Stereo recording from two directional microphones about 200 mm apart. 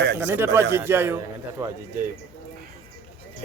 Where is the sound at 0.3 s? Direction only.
10° right (ahead or behind).